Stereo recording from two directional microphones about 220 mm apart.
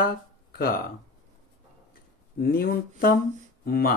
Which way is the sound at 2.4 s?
45° left (ahead or behind).